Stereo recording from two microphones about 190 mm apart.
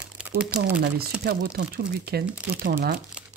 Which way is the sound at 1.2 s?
55° right (ahead or behind).